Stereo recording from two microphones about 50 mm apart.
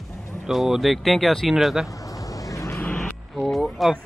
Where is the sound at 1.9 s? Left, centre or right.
Left.